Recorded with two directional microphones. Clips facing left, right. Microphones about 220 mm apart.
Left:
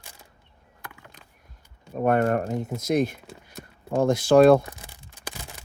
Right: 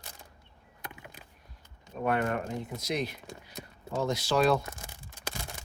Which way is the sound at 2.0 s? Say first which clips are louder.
Left 7 dB; 45° left (ahead or behind).